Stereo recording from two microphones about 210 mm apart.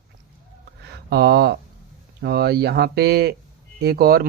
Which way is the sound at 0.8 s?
50° right (ahead or behind).